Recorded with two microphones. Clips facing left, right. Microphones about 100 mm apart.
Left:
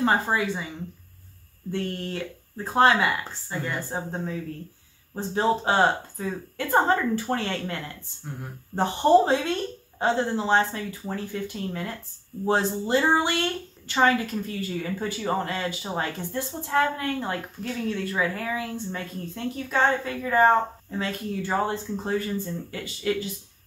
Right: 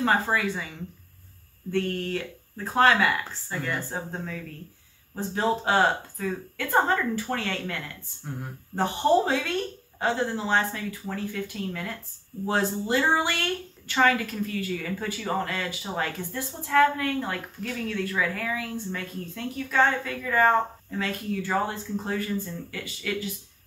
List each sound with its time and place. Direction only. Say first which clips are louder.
0.0 s speech: left 1 dB; 20° left (ahead or behind)
1.7 s speech: right 3 dB; 25° left (ahead or behind)